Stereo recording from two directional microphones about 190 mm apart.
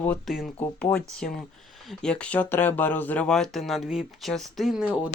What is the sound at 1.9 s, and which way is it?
Speech, 5° left (ahead or behind).